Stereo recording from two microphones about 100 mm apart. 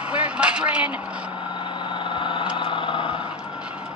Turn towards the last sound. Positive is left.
turn(degrees=55)  # may be behind; listen again after turning